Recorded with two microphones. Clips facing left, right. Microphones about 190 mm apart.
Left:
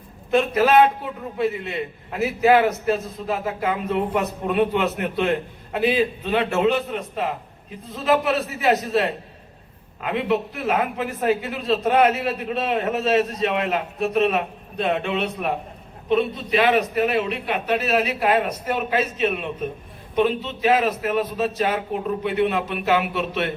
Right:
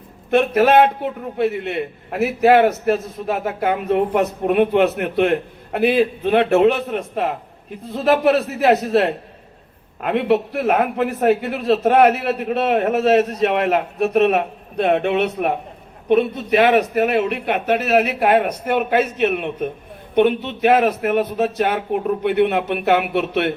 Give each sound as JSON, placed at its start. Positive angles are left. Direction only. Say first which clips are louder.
{"t": 0.3, "sound": "a man's voice", "louder": "right 4 dB", "side_deg": -65}